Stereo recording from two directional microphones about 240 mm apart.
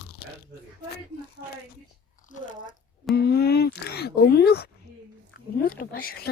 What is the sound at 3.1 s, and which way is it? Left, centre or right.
Speech, left.